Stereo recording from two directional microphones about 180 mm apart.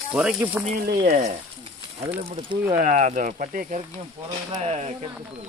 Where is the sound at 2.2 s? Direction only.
30° right (ahead or behind).